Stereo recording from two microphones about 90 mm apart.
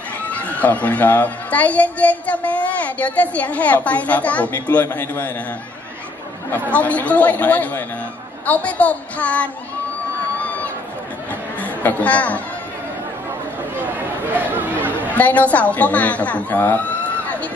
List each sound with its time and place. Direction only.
0.2 s speech: 15° left (ahead or behind)
6.5 s speech: 15° left (ahead or behind)
11.6 s speech: 15° left (ahead or behind)
14.3 s chatter: 20° right (ahead or behind)
15.1 s speech: 15° left (ahead or behind)